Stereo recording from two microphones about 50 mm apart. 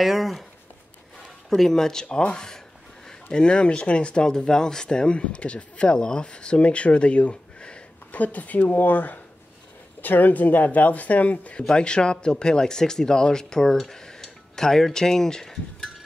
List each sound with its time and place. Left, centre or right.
0.0 s speech: centre
1.5 s speech: centre; by 11.6 s left
11.6 s speech: centre